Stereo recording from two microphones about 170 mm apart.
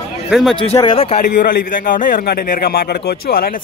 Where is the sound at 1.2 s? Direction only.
50° left (ahead or behind).